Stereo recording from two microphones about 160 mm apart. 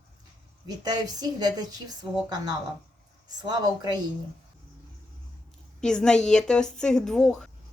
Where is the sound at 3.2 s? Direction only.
25° right (ahead or behind).